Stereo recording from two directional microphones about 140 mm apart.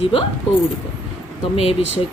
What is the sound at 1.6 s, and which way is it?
Speech, 45° left (ahead or behind).